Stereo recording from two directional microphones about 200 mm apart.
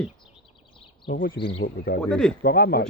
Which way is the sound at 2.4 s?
50° left (ahead or behind).